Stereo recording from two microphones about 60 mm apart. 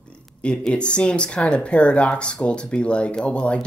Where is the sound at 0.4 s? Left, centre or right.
Centre.